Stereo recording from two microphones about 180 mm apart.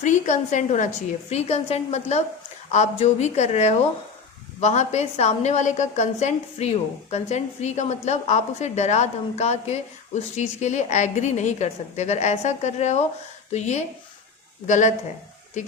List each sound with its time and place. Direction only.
0.0 s a woman's voice: 40° left (ahead or behind)